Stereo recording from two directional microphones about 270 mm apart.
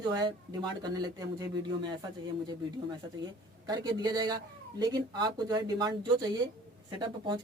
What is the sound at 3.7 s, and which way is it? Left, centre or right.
A woman's voice, centre.